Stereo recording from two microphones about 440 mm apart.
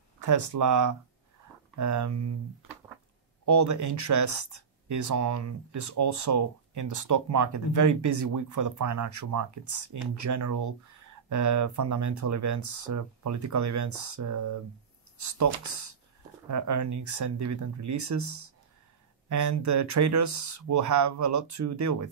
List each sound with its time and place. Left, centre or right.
0.2 s speech: right
3.4 s speech: right